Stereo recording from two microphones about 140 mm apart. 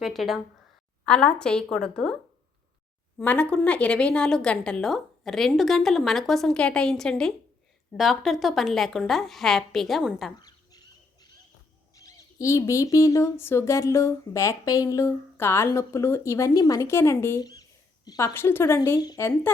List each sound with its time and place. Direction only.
0.0 s a woman's voice: centre (ahead or behind)
3.2 s a woman's voice: 10° left (ahead or behind)
10.3 s a sound: 30° left (ahead or behind)
11.9 s speech: 25° left (ahead or behind)
17.4 s a sound: 25° left (ahead or behind)
18.3 s speech: 15° left (ahead or behind)